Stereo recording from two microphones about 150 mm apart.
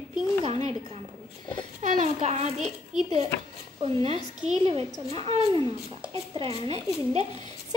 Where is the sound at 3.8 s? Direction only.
40° right (ahead or behind).